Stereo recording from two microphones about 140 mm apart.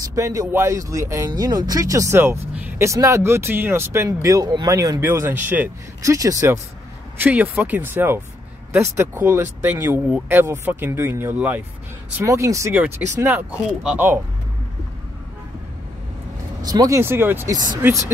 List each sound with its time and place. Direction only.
0.1 s speech: 25° right (ahead or behind)
12.2 s speech: 20° right (ahead or behind)
16.6 s speech: 25° right (ahead or behind)